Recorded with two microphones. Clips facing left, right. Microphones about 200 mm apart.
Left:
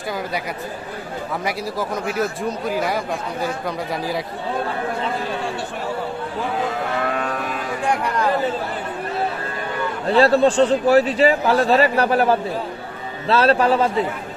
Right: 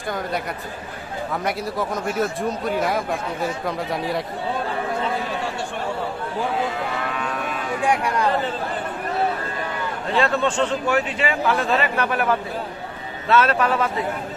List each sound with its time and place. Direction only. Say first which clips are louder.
1.5 s a man's voice: even; centre (ahead or behind)
10.1 s a man's voice: left 7 dB; 35° left (ahead or behind)